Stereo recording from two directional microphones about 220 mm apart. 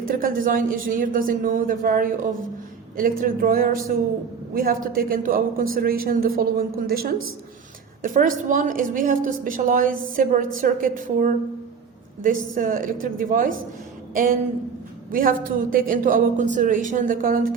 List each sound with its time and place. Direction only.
0.1 s a woman's voice: 40° right (ahead or behind)